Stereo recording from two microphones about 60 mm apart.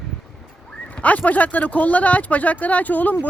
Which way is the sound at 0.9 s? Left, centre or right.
Left.